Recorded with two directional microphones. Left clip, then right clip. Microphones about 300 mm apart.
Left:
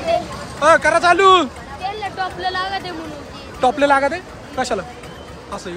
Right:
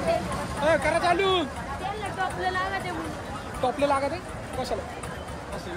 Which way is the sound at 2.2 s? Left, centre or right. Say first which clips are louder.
Left 5 dB; left.